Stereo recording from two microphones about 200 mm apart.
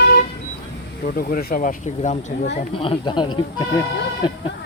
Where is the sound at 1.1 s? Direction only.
45° left (ahead or behind); by 3.8 s 20° left (ahead or behind).